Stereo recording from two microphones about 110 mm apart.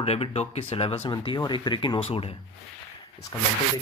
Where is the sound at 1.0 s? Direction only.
45° left (ahead or behind); by 2.3 s 60° left (ahead or behind).